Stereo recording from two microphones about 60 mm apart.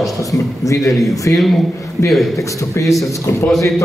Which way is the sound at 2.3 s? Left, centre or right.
Left.